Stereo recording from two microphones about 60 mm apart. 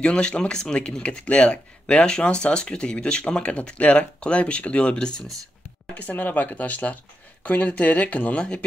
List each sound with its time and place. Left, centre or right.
0.0 s speech: centre
5.9 s speech: left